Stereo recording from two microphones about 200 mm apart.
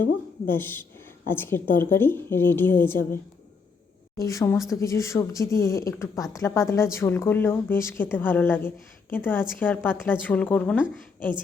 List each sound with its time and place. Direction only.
0.4 s speech: 10° left (ahead or behind)
4.2 s speech: 15° left (ahead or behind)